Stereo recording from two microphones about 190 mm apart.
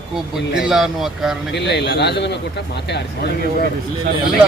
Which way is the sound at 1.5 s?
65° left (ahead or behind).